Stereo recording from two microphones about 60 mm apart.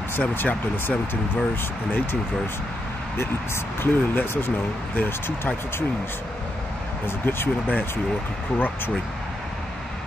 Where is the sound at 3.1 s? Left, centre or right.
Left.